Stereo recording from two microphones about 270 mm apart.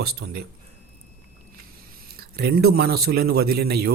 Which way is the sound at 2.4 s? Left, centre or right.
Right.